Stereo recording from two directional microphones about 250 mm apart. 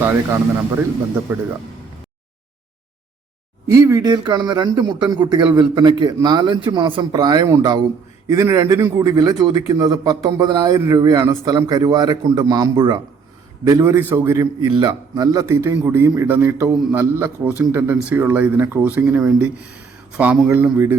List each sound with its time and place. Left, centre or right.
1.3 s a man's voice: centre
3.7 s a man's voice: centre